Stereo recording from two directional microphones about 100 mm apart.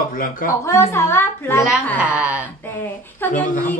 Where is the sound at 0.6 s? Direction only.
25° left (ahead or behind).